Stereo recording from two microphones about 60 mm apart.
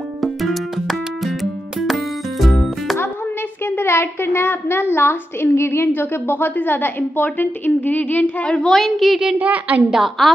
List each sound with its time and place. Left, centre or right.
0.2 s music: centre
3.6 s a woman's voice: left
8.5 s a woman's voice: centre
9.4 s a woman's voice: right
9.8 s a woman's voice: centre